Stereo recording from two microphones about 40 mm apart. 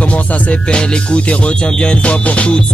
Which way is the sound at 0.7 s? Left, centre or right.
Left.